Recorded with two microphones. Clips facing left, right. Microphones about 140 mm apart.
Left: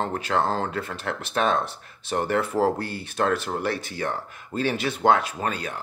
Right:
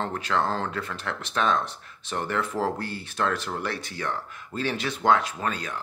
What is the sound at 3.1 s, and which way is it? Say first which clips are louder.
Speech: left 3 dB; 50° left (ahead or behind).